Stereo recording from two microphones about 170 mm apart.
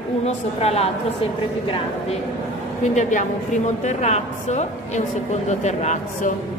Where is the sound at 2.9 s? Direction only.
45° left (ahead or behind).